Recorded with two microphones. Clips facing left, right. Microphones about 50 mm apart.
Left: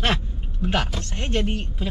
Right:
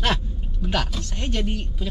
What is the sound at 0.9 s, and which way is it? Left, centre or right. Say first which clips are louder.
Speech: left 2 dB; left.